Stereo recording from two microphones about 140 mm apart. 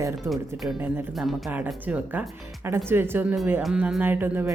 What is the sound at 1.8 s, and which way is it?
Speech, 10° right (ahead or behind).